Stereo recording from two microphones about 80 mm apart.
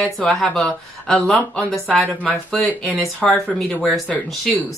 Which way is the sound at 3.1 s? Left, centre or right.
Centre.